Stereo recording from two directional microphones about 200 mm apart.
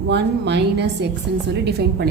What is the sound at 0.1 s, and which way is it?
A woman's voice, 60° right (ahead or behind).